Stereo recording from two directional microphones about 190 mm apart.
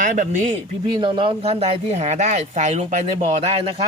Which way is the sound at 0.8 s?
25° right (ahead or behind).